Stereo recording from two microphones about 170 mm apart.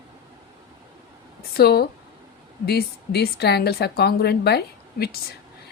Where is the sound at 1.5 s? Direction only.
70° left (ahead or behind).